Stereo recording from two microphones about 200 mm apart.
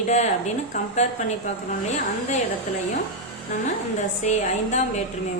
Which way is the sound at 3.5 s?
35° left (ahead or behind).